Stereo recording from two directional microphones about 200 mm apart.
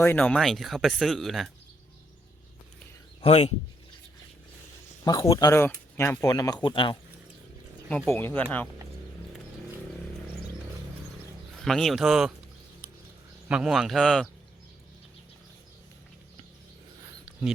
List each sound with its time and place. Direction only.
0.0 s speech: 10° left (ahead or behind)
3.2 s speech: 30° left (ahead or behind)
5.0 s speech: 20° left (ahead or behind)
7.9 s speech: 10° left (ahead or behind)
11.6 s speech: centre (ahead or behind)
13.5 s speech: centre (ahead or behind)